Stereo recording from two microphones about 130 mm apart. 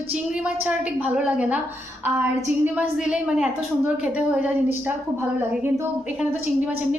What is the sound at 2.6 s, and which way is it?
A woman's voice, 10° right (ahead or behind).